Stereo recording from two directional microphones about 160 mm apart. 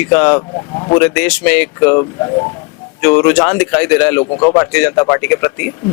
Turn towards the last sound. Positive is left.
turn(degrees=10)  # may be behind; listen again after turning